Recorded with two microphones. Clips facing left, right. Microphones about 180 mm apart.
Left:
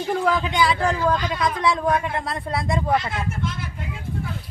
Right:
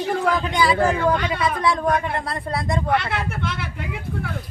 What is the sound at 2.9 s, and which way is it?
Vehicle, 70° right (ahead or behind).